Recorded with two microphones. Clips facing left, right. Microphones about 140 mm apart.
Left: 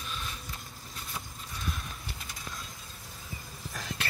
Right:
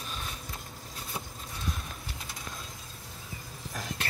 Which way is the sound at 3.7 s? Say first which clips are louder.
Right 1 dB; 45° right (ahead or behind).